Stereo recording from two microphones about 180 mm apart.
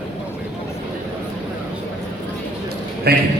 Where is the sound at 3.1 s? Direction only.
60° right (ahead or behind).